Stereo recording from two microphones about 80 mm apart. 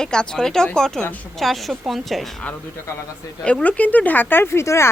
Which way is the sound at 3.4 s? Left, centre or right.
Centre.